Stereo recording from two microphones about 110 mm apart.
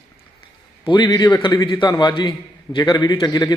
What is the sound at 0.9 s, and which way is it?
A man's voice, 40° left (ahead or behind).